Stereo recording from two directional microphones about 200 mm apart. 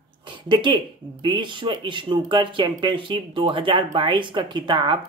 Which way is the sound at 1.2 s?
25° right (ahead or behind).